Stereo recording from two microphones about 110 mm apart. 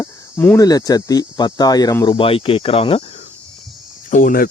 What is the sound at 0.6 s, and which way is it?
Speech, 35° left (ahead or behind).